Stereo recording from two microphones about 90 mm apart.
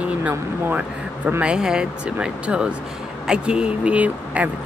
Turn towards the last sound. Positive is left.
turn(degrees=-15)  # may be behind; listen again after turning